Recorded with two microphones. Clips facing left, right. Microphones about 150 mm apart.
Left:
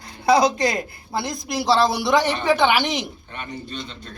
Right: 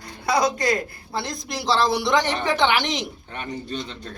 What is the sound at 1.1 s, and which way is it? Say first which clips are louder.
A woman's voice: left 4 dB; 10° left (ahead or behind).